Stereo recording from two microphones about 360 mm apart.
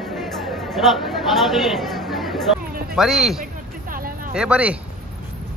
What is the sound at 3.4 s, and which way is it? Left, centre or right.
Hubbub, right.